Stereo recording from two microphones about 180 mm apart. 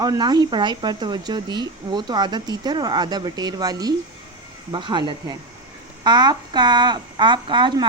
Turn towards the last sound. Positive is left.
turn(degrees=-25)  # may be behind; listen again after turning